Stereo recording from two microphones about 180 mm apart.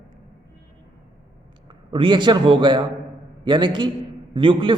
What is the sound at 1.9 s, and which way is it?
A man's voice, 30° right (ahead or behind).